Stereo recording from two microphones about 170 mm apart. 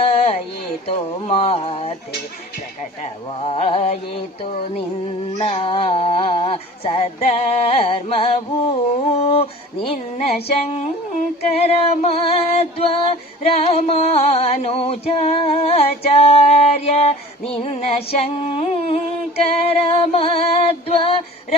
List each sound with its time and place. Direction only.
0.0 s a sound: 35° left (ahead or behind)
0.9 s female singing: 35° left (ahead or behind)
3.0 s female singing: 35° left (ahead or behind)
5.4 s female singing: 35° left (ahead or behind)
9.1 s a sound: 35° left (ahead or behind)
10.2 s female singing: 35° left (ahead or behind)